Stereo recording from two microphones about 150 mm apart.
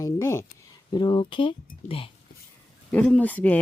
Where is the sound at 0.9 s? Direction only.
30° left (ahead or behind).